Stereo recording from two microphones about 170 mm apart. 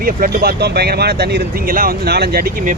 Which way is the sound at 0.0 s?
60° right (ahead or behind).